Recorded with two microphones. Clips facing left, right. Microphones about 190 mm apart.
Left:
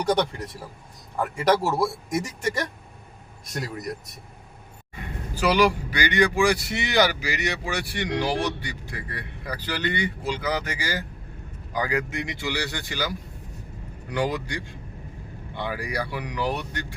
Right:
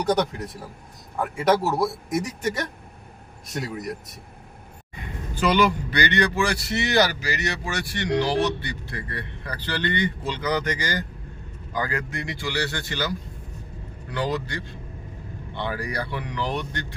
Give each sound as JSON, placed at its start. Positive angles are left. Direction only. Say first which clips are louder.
{"t": 0.0, "sound": "speech", "louder": "right 1 dB", "side_deg": 0}
{"t": 1.4, "sound": "speech", "louder": "right 1 dB", "side_deg": 0}
{"t": 5.3, "sound": "speech", "louder": "even", "side_deg": 10}